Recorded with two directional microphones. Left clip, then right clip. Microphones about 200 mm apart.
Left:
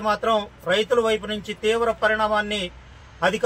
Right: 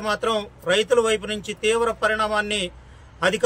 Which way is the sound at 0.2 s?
20° right (ahead or behind).